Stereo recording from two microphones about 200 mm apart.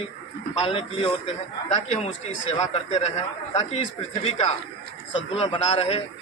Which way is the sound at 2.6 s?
30° left (ahead or behind).